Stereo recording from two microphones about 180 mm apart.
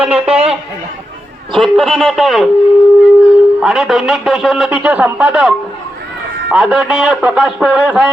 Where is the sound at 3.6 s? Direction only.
5° right (ahead or behind).